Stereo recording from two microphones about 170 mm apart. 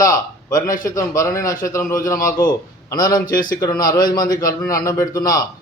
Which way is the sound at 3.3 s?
55° left (ahead or behind).